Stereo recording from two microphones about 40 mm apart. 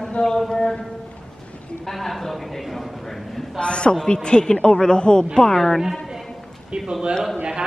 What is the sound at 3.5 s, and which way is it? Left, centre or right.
A woman's voice, left.